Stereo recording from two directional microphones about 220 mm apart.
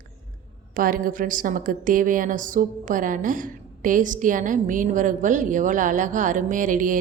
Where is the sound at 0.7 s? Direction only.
40° right (ahead or behind).